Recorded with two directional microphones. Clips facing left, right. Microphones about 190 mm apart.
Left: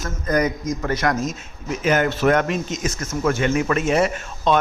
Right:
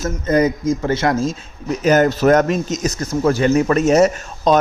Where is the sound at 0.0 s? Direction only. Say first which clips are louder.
Right 5 dB; 25° right (ahead or behind).